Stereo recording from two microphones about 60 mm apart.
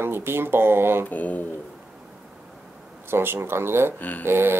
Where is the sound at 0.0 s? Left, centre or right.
Right.